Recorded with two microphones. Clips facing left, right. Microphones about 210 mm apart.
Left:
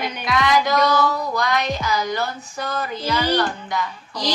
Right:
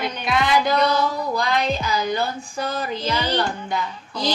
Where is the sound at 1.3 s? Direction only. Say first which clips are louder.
Even; 30° right (ahead or behind).